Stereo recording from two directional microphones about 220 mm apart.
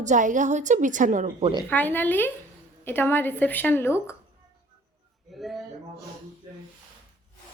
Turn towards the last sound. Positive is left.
turn(degrees=0)  # may be behind; listen again after turning